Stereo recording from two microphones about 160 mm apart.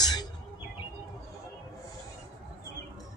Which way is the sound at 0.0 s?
25° left (ahead or behind).